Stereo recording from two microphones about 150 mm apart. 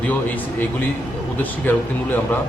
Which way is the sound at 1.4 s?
15° left (ahead or behind).